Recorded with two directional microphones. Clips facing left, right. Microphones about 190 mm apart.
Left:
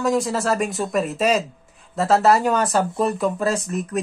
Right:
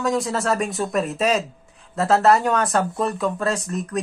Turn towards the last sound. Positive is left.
turn(degrees=0)  # may be behind; listen again after turning